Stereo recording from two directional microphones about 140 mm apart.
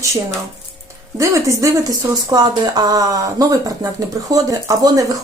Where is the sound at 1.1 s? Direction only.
20° right (ahead or behind).